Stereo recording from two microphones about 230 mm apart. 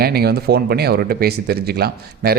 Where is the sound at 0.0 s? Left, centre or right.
Right.